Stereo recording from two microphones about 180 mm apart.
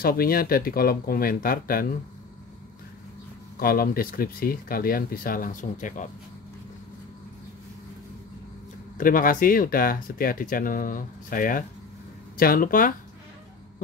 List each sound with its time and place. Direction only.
0.0 s speech: 55° left (ahead or behind)
3.5 s speech: 55° left (ahead or behind)
8.9 s speech: 50° left (ahead or behind)